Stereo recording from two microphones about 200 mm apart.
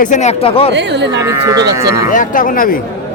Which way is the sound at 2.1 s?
40° left (ahead or behind).